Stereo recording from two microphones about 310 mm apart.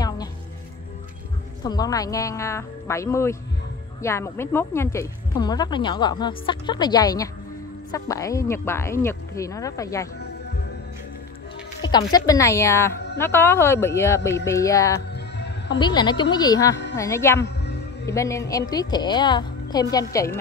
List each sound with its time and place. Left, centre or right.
1.6 s speech: centre
11.8 s speech: centre
15.1 s music: left
15.8 s speech: centre
17.4 s music: left
18.0 s speech: centre